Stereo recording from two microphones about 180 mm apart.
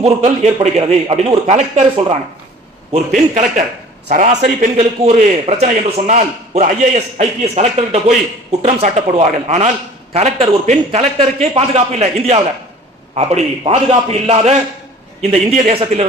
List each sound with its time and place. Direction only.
0.0 s a man's voice: 40° right (ahead or behind)
3.3 s a man's voice: 40° right (ahead or behind)